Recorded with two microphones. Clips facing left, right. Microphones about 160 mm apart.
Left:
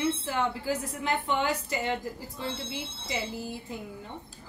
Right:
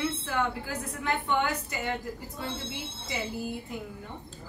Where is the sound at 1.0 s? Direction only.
25° left (ahead or behind).